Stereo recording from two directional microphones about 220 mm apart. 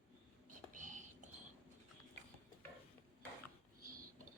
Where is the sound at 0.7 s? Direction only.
35° right (ahead or behind).